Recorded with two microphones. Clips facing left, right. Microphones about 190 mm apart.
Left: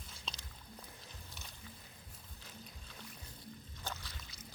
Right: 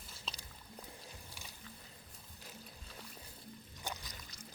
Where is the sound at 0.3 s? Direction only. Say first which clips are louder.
Even; 5° right (ahead or behind).